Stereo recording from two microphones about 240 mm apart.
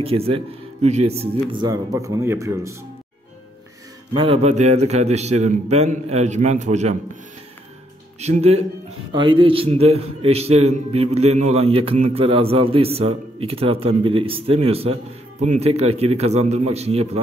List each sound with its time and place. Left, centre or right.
0.0 s a man's voice: right
4.1 s a man's voice: right
8.2 s a man's voice: right